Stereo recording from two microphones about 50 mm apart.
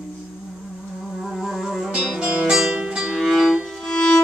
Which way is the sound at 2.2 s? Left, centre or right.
Centre.